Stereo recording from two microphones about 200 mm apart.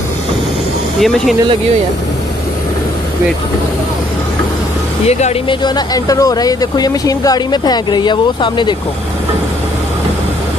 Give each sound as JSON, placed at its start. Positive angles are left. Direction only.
{"t": 5.0, "sound": "speech", "side_deg": 30}